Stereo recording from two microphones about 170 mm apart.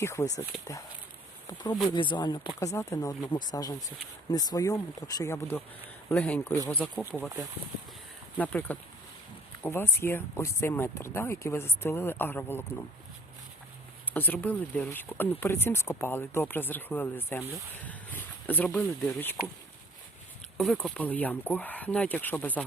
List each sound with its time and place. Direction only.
0.0 s speech: 15° left (ahead or behind)
0.5 s speech: centre (ahead or behind)
1.5 s speech: 25° left (ahead or behind); by 6.9 s 10° left (ahead or behind)
8.4 s speech: 10° left (ahead or behind)
14.1 s speech: 10° left (ahead or behind)
20.6 s speech: 5° left (ahead or behind)